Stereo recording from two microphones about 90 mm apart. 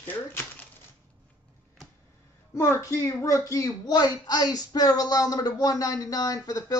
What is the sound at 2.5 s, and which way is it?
A child's voice, 35° left (ahead or behind).